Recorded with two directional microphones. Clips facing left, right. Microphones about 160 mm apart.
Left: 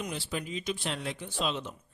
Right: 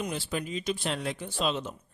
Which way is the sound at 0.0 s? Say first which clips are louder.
Right 3 dB; 45° right (ahead or behind).